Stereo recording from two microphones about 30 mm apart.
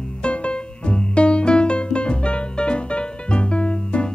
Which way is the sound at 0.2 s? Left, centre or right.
Left.